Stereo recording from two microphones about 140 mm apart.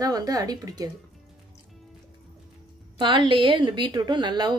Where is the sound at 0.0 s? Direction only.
25° right (ahead or behind).